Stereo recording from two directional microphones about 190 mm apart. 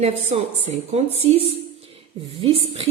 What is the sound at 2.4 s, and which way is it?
Speech, 30° right (ahead or behind).